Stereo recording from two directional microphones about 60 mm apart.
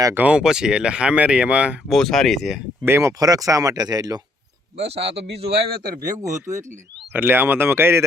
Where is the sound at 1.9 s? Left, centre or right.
Centre.